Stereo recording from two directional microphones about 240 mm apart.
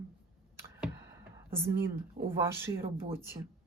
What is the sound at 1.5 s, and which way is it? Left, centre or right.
Speech, centre.